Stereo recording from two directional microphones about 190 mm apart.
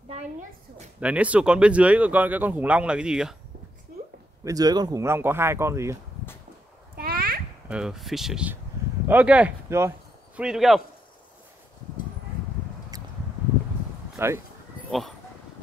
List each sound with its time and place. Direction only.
0.1 s a woman's voice: 40° right (ahead or behind)
1.0 s speech: 5° right (ahead or behind)
4.5 s speech: 20° right (ahead or behind)
7.0 s a sound: 50° right (ahead or behind)
7.6 s speech: 5° right (ahead or behind)
12.9 s a sound: 20° right (ahead or behind)
14.1 s speech: 15° right (ahead or behind)
14.9 s speech: centre (ahead or behind)